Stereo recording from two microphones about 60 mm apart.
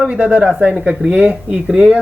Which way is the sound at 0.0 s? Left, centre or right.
Centre.